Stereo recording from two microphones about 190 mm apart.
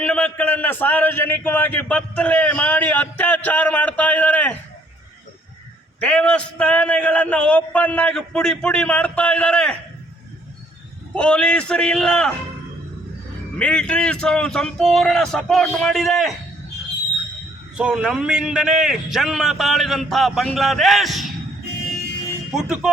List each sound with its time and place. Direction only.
0.0 s a man's voice: 5° left (ahead or behind)
6.0 s a man's voice: 5° left (ahead or behind)
11.1 s a man's voice: 5° left (ahead or behind)
13.6 s a man's voice: 5° left (ahead or behind)
17.7 s a man's voice: 5° right (ahead or behind)
22.5 s a man's voice: 5° right (ahead or behind)